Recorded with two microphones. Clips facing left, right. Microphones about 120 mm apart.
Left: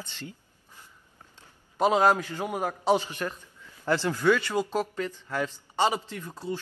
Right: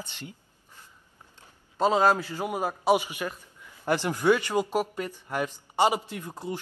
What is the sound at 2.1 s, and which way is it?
A man's voice, 10° right (ahead or behind).